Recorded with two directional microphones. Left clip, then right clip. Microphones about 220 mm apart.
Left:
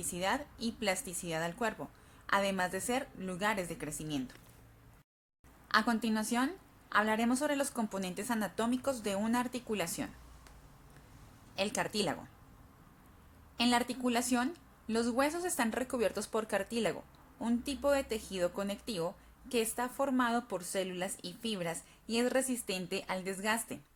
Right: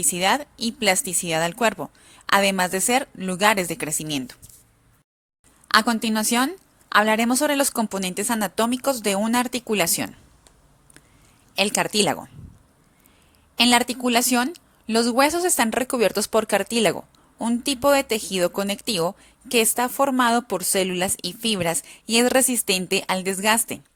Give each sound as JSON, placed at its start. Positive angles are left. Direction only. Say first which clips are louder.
{"t": 0.1, "sound": "a woman's voice", "louder": "right 13 dB", "side_deg": -40}
{"t": 5.6, "sound": "a woman's voice", "louder": "right 12 dB", "side_deg": -35}
{"t": 11.5, "sound": "a woman's voice", "louder": "right 13 dB", "side_deg": -35}
{"t": 13.6, "sound": "a woman's voice", "louder": "right 13 dB", "side_deg": -35}